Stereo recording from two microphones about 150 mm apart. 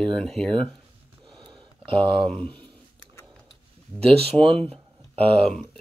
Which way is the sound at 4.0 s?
40° right (ahead or behind).